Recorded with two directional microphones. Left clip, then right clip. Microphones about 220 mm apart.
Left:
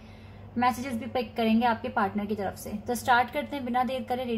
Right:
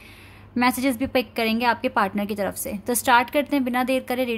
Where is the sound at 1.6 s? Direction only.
45° right (ahead or behind).